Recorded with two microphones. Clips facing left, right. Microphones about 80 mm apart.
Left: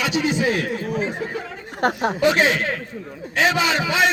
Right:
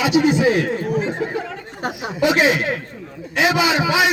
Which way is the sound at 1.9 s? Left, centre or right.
Left.